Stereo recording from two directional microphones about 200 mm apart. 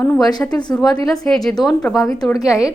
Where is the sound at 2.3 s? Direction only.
15° left (ahead or behind).